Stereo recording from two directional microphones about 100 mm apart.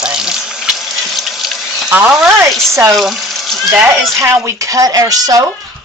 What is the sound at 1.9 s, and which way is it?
Speech, 10° right (ahead or behind).